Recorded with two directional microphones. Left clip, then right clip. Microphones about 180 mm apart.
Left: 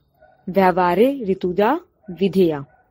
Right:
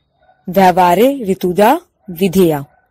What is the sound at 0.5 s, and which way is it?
Speech, 45° right (ahead or behind).